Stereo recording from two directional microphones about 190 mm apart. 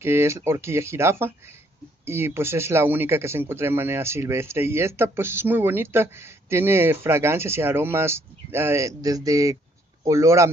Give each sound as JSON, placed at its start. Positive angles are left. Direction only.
{"t": 0.0, "sound": "speech", "side_deg": -15}